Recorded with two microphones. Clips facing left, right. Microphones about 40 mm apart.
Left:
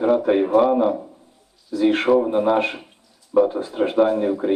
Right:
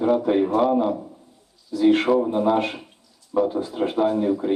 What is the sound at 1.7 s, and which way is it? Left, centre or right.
Speech, centre.